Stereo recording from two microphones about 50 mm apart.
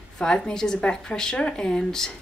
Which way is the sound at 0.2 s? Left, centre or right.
Centre.